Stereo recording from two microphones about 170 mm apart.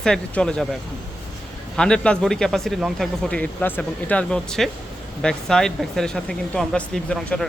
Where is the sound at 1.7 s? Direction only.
5° left (ahead or behind).